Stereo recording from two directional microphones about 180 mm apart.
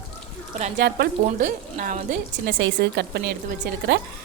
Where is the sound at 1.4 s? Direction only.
45° right (ahead or behind).